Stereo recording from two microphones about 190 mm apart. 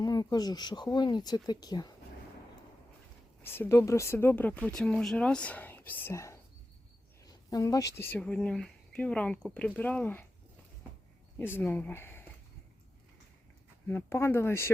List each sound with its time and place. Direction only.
0.0 s speech: 20° left (ahead or behind)
3.4 s speech: 10° left (ahead or behind)
11.3 s speech: 10° left (ahead or behind)
13.8 s speech: 10° left (ahead or behind)